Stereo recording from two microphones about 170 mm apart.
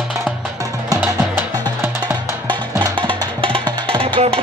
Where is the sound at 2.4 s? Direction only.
25° right (ahead or behind).